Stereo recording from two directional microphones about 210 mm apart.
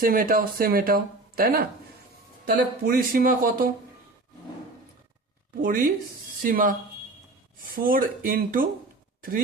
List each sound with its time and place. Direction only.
0.0 s speech: 40° right (ahead or behind)
5.6 s speech: 40° right (ahead or behind)